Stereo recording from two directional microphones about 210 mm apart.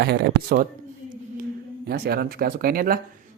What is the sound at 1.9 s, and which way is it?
Speech, 45° right (ahead or behind).